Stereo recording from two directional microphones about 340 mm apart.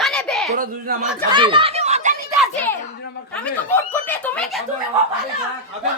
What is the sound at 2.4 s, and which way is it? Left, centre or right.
Children playing, centre.